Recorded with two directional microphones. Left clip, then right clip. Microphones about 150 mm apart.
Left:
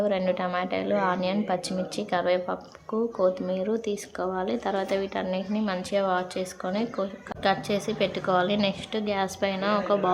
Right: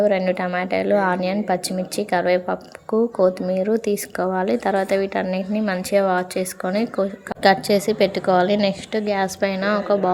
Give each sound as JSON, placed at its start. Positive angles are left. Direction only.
{"t": 0.0, "sound": "speech", "side_deg": -30}